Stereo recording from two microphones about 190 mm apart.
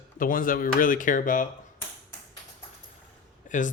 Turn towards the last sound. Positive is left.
turn(degrees=40)  # may be behind; listen again after turning